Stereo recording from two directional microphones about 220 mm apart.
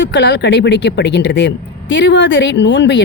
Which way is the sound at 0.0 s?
55° left (ahead or behind).